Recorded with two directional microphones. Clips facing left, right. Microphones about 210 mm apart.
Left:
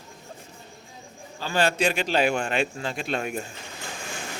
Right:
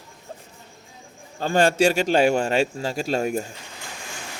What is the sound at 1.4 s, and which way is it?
A man's voice, 45° right (ahead or behind).